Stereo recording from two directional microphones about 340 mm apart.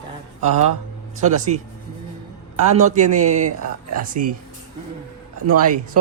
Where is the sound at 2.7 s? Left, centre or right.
Right.